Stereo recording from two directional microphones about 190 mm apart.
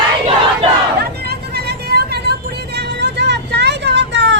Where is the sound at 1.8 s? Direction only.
60° right (ahead or behind).